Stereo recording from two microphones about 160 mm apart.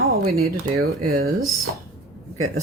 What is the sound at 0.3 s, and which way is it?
Speech, 75° right (ahead or behind).